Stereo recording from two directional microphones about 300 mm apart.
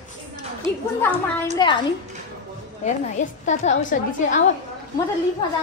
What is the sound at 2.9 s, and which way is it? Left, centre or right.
A woman's voice, left.